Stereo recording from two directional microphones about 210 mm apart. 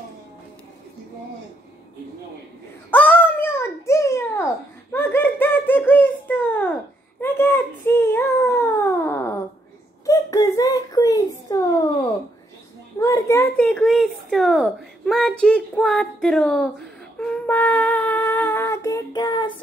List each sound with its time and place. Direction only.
2.9 s babbling: 10° left (ahead or behind)
4.9 s giggle: 10° left (ahead or behind)
7.2 s a sound: 10° left (ahead or behind)